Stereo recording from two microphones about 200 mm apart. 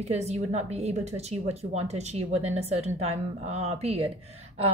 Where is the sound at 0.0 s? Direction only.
35° right (ahead or behind).